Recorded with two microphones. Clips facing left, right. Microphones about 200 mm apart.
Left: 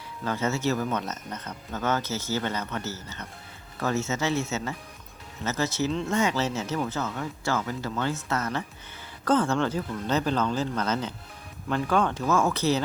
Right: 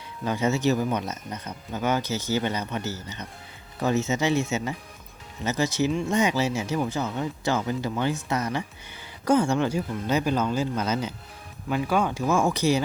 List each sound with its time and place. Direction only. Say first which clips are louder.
0.3 s speech: right 3 dB; 15° right (ahead or behind)